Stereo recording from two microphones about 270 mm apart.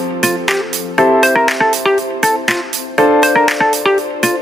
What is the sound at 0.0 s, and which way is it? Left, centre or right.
Music, centre.